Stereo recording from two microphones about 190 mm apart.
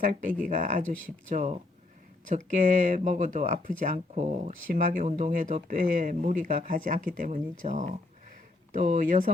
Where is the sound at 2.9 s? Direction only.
45° right (ahead or behind).